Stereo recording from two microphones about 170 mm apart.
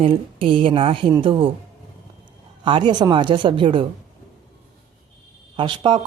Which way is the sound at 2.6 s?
25° right (ahead or behind).